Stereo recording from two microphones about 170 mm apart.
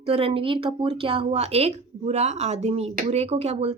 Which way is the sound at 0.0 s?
35° right (ahead or behind).